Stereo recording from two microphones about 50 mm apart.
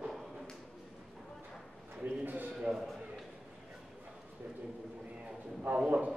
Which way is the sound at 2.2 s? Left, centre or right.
Right.